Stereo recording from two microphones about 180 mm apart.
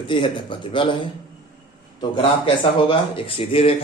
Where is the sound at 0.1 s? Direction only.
25° left (ahead or behind).